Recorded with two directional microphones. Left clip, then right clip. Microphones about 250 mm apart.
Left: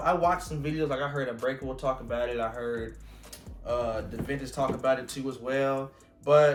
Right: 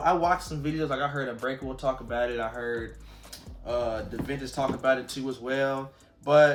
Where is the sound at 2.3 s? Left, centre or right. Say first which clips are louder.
Even; centre.